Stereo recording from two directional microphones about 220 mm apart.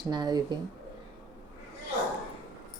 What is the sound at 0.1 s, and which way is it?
Speech, 20° right (ahead or behind).